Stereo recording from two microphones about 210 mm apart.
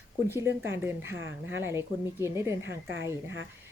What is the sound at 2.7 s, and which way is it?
Speech, 65° right (ahead or behind).